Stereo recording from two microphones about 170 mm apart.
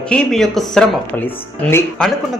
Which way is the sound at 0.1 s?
5° left (ahead or behind).